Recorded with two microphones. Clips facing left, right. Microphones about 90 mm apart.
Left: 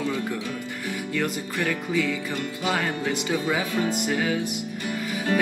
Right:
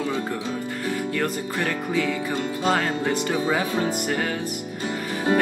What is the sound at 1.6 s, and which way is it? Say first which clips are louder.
Speech: even; 20° right (ahead or behind).